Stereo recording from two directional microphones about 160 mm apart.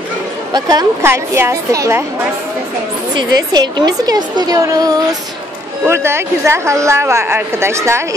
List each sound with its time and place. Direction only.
0.5 s a woman's voice: 25° right (ahead or behind)
3.2 s a woman's voice: 25° right (ahead or behind)